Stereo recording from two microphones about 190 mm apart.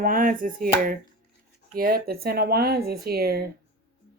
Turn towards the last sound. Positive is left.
turn(degrees=-55)  # may be behind; listen again after turning